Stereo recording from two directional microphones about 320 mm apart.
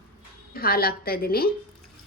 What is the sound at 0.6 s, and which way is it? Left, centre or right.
Speech, left.